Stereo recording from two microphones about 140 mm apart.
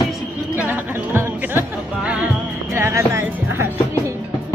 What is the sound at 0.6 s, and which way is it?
Music, 15° right (ahead or behind).